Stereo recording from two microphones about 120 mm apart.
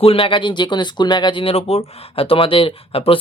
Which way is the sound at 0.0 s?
50° left (ahead or behind).